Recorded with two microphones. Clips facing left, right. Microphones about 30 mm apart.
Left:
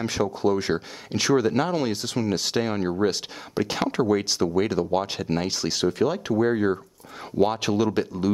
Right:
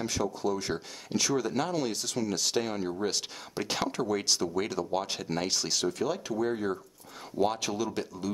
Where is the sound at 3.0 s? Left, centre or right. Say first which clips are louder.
Left 7 dB; centre; by 8.3 s left.